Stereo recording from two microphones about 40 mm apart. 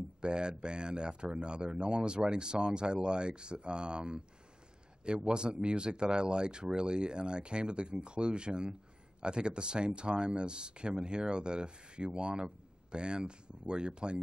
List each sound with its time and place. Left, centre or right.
0.2 s speech: right